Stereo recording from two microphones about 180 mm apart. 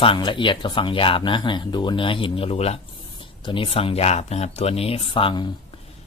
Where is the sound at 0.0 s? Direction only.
30° left (ahead or behind).